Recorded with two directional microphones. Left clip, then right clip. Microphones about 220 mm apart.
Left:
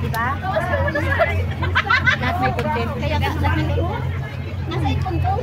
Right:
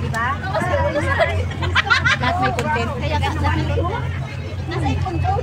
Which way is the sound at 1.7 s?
40° right (ahead or behind).